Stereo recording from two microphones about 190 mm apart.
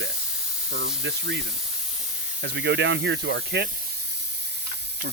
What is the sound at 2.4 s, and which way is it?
Speech, 65° right (ahead or behind).